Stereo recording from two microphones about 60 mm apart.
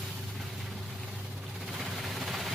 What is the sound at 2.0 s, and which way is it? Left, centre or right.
Vehicle, centre.